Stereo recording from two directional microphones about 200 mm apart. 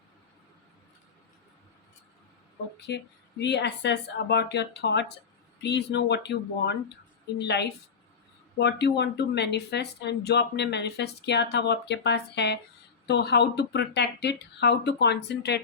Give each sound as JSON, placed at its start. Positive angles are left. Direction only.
{"t": 2.9, "sound": "speech", "side_deg": 55}